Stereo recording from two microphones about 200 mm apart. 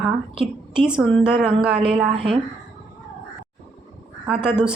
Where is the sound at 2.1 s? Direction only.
25° right (ahead or behind).